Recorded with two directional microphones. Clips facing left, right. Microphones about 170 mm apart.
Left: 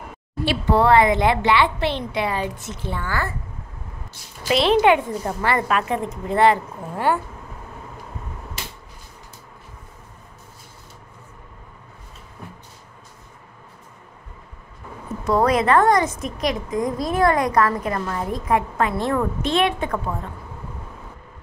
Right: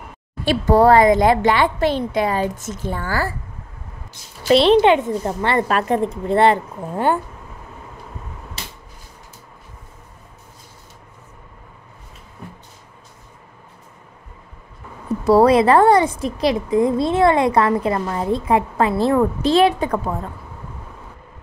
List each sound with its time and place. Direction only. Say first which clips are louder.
0.5 s a woman's voice: right 4 dB; 40° right (ahead or behind)
4.7 s a woman's voice: right 3 dB; 25° right (ahead or behind)
15.2 s a woman's voice: right 6 dB; 30° right (ahead or behind)